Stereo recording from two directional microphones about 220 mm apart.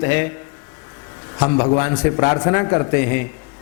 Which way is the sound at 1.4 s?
25° left (ahead or behind).